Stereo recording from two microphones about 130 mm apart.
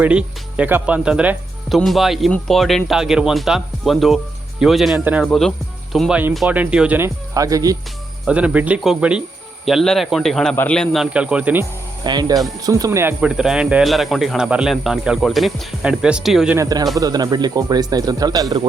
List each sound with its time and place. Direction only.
0.0 s speech: 10° right (ahead or behind)
4.9 s speech: 15° right (ahead or behind)
5.2 s speech: 5° left (ahead or behind)
7.3 s speech: 25° right (ahead or behind)
8.3 s speech: 10° right (ahead or behind)
12.0 s speech: 30° right (ahead or behind)
13.2 s speech: 5° right (ahead or behind)
16.6 s speech: 30° right (ahead or behind)